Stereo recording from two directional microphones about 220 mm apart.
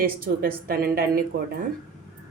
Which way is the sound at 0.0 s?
40° right (ahead or behind).